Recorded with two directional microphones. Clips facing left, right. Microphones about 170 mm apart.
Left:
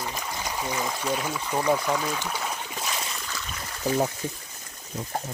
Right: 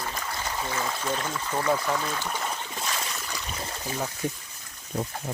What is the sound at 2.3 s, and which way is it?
Boat, 5° left (ahead or behind).